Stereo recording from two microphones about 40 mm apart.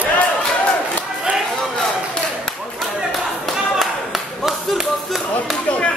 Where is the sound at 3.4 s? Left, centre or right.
Centre.